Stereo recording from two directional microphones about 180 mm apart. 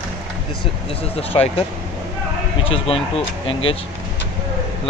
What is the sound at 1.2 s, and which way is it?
Speech, 35° left (ahead or behind).